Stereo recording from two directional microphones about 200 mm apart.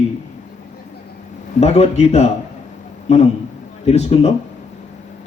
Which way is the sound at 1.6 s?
35° left (ahead or behind).